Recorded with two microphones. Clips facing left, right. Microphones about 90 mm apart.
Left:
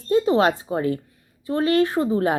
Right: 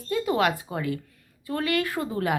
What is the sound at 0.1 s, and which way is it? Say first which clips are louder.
A woman's voice: left 6 dB; 30° left (ahead or behind).